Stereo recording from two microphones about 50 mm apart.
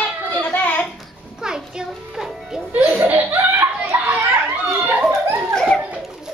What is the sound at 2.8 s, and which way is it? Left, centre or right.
Laughter, right.